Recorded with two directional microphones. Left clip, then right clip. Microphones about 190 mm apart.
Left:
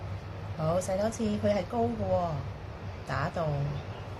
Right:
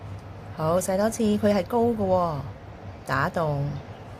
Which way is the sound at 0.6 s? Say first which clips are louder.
Right 6 dB; 60° right (ahead or behind).